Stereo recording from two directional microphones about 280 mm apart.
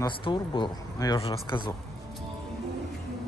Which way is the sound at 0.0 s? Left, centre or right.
Centre.